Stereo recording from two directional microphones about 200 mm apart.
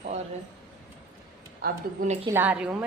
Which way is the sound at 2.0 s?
45° right (ahead or behind).